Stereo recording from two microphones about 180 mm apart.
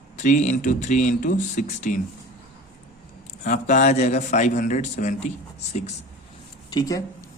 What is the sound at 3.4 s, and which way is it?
A man's voice, 45° left (ahead or behind).